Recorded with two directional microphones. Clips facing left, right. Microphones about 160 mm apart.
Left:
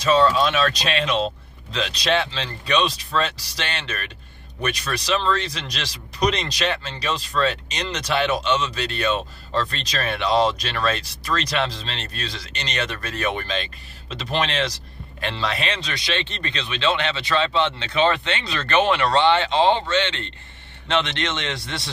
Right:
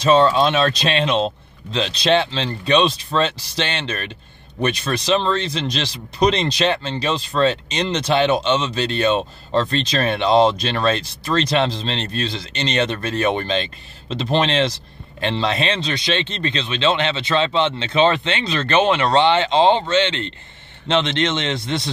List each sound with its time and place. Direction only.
0.0 s speech: 25° right (ahead or behind)